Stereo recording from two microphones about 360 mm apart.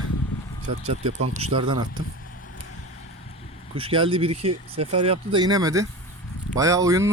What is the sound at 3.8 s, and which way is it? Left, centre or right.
Speech, centre.